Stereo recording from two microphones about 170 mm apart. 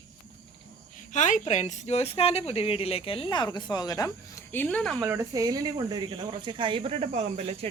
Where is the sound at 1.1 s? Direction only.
45° left (ahead or behind); by 4.9 s 5° left (ahead or behind).